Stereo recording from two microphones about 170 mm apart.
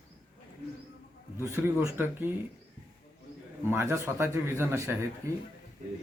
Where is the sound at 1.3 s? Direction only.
15° right (ahead or behind).